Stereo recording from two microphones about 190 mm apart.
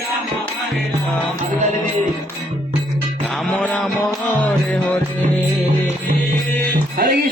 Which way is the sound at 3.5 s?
5° left (ahead or behind).